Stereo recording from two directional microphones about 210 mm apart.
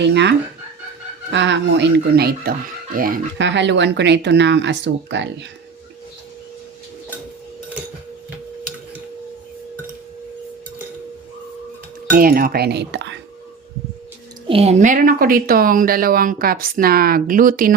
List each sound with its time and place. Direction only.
0.0 s a woman's voice: 55° right (ahead or behind)
3.3 s speech: 60° right (ahead or behind)
12.1 s a woman's voice: 45° right (ahead or behind)
14.4 s a woman's voice: 30° right (ahead or behind)